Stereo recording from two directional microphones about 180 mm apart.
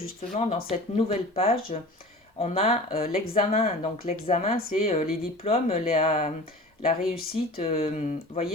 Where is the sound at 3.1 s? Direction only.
55° left (ahead or behind).